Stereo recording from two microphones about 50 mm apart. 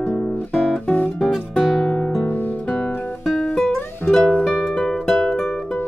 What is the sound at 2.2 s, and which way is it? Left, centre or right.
Guitar, left.